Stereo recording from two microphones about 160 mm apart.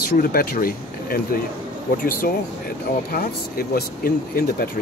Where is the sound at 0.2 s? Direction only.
70° left (ahead or behind).